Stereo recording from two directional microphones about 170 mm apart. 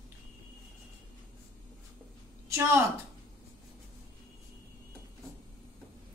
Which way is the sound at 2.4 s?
15° right (ahead or behind).